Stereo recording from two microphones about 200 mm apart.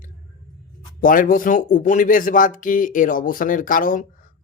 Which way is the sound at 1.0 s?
45° left (ahead or behind).